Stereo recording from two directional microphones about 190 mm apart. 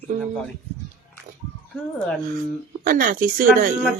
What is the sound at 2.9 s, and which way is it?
Speech, 45° right (ahead or behind).